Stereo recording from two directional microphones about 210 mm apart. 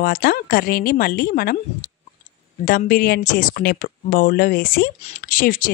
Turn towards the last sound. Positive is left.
turn(degrees=40)  # may be behind; listen again after turning